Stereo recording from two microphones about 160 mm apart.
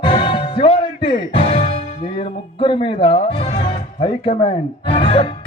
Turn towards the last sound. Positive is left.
turn(degrees=35)  # may be behind; listen again after turning